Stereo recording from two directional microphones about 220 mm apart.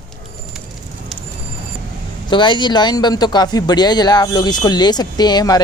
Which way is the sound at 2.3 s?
20° left (ahead or behind).